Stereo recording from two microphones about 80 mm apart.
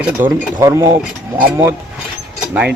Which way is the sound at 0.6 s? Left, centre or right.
Right.